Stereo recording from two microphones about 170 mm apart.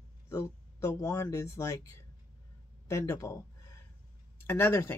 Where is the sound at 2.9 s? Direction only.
15° left (ahead or behind).